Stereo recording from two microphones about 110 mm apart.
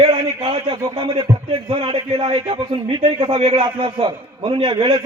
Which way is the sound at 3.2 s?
65° right (ahead or behind).